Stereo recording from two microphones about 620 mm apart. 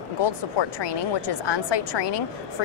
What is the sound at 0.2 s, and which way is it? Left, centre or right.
A woman's voice, left.